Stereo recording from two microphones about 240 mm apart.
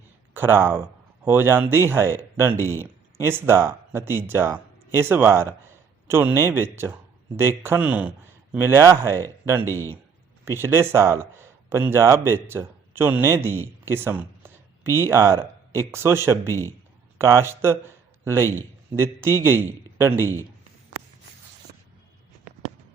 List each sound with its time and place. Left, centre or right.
0.3 s speech: centre
9.6 s a man's voice: centre
10.4 s a man's voice: centre